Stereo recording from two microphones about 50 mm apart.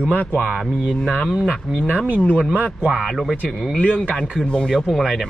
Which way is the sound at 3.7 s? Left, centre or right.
Left.